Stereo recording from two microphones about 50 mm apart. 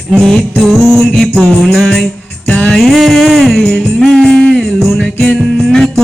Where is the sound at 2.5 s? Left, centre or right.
Centre.